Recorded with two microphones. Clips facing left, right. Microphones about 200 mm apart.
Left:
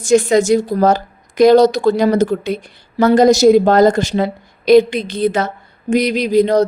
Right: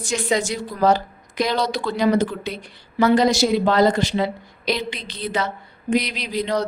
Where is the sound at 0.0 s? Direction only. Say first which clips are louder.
Left 11 dB; 45° left (ahead or behind).